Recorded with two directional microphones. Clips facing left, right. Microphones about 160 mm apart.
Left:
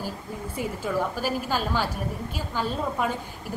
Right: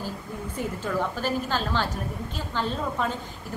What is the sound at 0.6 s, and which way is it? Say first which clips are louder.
A woman's voice: left 1 dB; 10° left (ahead or behind).